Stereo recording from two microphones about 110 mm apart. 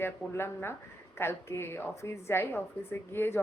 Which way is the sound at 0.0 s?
20° left (ahead or behind).